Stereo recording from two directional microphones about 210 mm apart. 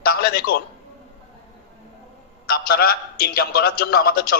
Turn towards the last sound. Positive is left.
turn(degrees=45)  # may be behind; listen again after turning